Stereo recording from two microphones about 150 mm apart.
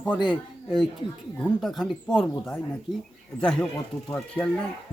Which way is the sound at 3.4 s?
5° left (ahead or behind).